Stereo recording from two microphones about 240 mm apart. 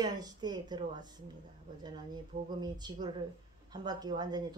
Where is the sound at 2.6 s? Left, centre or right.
Centre.